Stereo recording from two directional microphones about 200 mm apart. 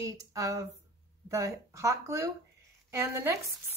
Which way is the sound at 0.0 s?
15° right (ahead or behind).